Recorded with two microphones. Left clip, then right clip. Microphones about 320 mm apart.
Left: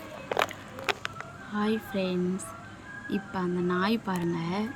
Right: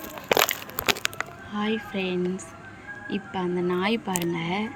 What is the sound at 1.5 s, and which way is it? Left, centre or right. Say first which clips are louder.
Speech: right 1 dB; centre.